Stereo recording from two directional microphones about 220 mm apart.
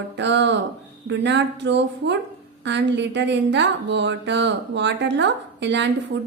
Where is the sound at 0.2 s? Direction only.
55° right (ahead or behind).